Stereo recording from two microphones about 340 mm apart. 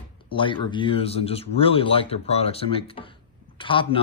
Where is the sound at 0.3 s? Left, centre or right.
Centre.